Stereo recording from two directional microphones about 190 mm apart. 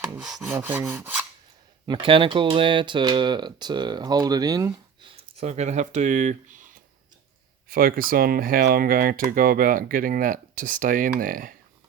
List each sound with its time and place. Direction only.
0.0 s filing: 5° right (ahead or behind)
0.5 s rub: 10° right (ahead or behind)
1.9 s speech: 25° right (ahead or behind)
5.1 s speech: 35° right (ahead or behind)